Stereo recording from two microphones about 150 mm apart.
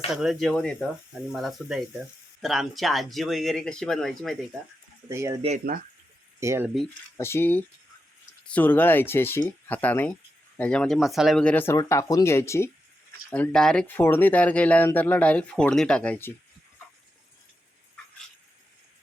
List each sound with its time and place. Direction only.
0.1 s speech: 5° right (ahead or behind)
5.0 s speech: 20° right (ahead or behind)
6.4 s speech: 20° right (ahead or behind)
7.2 s speech: 15° left (ahead or behind)